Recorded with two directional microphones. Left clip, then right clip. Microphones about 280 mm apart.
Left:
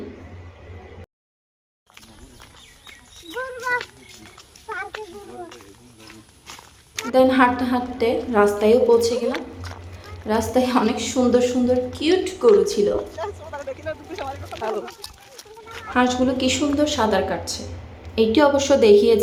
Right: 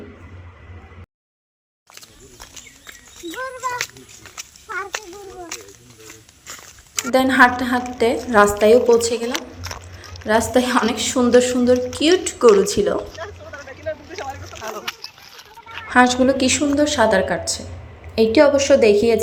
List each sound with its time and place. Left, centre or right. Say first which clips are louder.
6.9 s a woman's voice: even; centre
13.2 s speech: left 3 dB; centre
15.9 s a woman's voice: right 5 dB; centre